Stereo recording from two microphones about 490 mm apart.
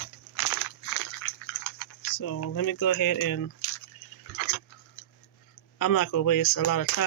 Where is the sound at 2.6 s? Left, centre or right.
Left.